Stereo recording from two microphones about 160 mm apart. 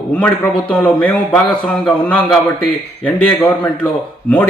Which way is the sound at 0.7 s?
10° left (ahead or behind).